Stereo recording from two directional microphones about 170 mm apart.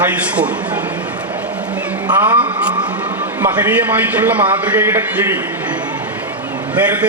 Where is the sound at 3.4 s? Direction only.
10° right (ahead or behind).